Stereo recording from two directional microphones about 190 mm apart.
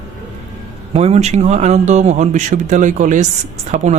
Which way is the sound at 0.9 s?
35° right (ahead or behind).